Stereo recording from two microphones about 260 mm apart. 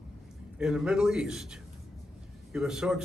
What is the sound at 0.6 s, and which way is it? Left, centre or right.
A man's voice, centre.